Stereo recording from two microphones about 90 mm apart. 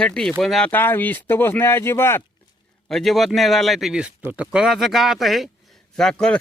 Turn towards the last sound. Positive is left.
turn(degrees=10)  # may be behind; listen again after turning